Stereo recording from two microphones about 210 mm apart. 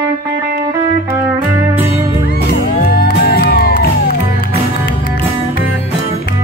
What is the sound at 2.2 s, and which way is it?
Music, 45° left (ahead or behind).